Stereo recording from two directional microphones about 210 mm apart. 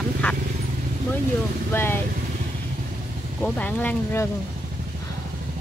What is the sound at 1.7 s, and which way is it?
Speech, 10° left (ahead or behind).